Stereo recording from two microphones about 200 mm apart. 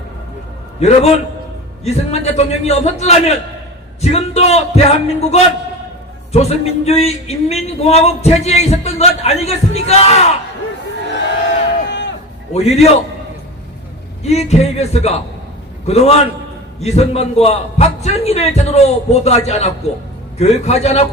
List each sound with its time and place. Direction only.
0.8 s speech: 30° left (ahead or behind)
11.9 s a sound: 65° left (ahead or behind)
12.5 s speech: 30° left (ahead or behind)
14.3 s speech: 35° left (ahead or behind)